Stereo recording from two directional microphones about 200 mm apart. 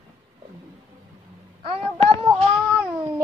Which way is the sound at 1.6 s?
25° right (ahead or behind).